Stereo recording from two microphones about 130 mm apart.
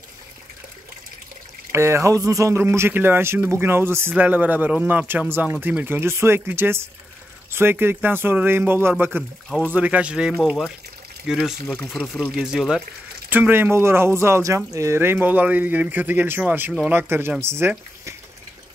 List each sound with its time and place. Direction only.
1.7 s speech: 20° right (ahead or behind); by 12.8 s 5° right (ahead or behind)
13.3 s speech: 15° right (ahead or behind)